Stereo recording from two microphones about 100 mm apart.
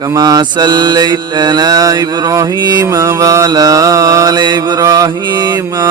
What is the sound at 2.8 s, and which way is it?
Mantra, 30° right (ahead or behind).